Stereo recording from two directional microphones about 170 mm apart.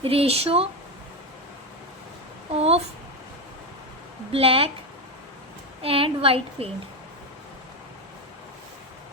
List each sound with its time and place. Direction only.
0.0 s a woman's voice: 35° right (ahead or behind)
2.6 s a woman's voice: 35° right (ahead or behind)
4.3 s a woman's voice: 35° right (ahead or behind)
5.8 s a woman's voice: 35° right (ahead or behind)